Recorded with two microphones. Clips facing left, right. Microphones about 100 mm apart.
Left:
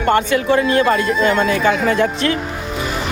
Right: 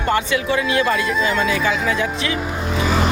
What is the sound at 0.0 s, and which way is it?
Speech, 45° left (ahead or behind).